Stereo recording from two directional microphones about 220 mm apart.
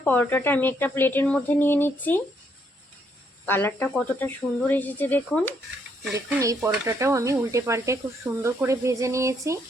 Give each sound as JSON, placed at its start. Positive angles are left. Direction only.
{"t": 0.0, "sound": "a woman's voice", "side_deg": 10}
{"t": 3.4, "sound": "a woman's voice", "side_deg": 10}
{"t": 6.1, "sound": "speech", "side_deg": -10}